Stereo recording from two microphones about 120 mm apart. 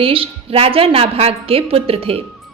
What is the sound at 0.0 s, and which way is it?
A woman's voice, 50° right (ahead or behind).